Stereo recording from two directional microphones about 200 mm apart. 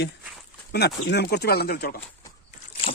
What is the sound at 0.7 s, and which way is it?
Speech, 55° left (ahead or behind).